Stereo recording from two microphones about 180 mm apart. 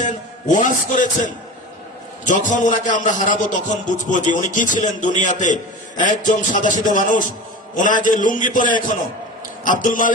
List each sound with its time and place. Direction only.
0.0 s a man's voice: 45° left (ahead or behind)